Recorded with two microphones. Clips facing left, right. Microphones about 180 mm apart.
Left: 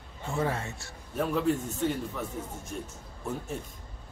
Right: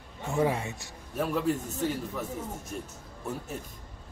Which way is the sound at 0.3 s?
15° right (ahead or behind).